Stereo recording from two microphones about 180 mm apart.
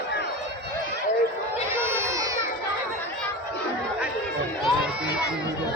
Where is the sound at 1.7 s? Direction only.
15° right (ahead or behind).